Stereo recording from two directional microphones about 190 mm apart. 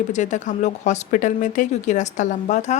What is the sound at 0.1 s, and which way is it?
Speech, 40° left (ahead or behind).